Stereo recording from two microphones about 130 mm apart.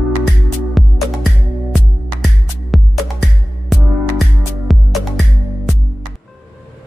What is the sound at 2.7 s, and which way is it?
Music, centre (ahead or behind).